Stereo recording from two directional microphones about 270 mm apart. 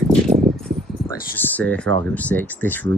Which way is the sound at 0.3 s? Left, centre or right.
Centre.